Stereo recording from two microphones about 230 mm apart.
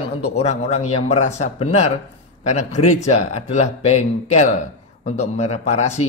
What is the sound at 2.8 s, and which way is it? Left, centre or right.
Speech, left.